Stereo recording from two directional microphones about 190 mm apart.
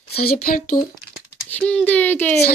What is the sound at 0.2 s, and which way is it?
Speech, 45° left (ahead or behind).